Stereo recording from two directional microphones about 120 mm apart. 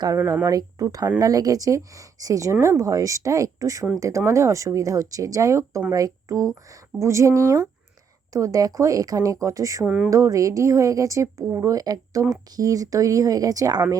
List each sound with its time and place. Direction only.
0.4 s speech: 30° right (ahead or behind)
9.8 s speech: 5° right (ahead or behind)
10.1 s speech: 30° right (ahead or behind)